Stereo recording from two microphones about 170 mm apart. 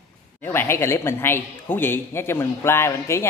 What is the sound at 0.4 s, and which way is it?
A man's voice, 15° left (ahead or behind).